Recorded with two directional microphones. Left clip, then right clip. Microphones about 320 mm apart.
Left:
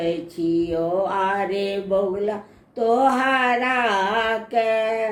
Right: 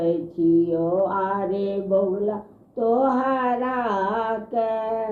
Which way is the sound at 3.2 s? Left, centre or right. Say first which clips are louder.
Left 3 dB; centre.